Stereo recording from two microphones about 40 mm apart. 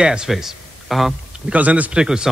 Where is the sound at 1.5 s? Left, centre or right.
Right.